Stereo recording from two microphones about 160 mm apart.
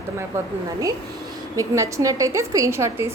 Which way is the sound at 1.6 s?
20° right (ahead or behind).